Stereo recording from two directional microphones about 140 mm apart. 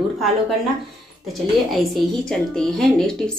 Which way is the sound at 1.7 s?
Centre (ahead or behind).